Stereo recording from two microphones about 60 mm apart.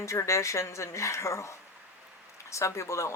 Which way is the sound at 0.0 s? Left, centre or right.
Left.